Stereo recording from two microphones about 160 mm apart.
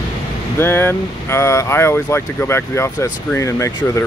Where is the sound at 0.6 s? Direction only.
15° left (ahead or behind).